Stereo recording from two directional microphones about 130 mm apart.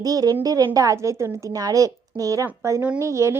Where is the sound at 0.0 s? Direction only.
30° right (ahead or behind).